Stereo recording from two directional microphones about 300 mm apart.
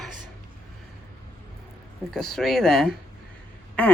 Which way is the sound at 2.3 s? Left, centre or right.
Centre.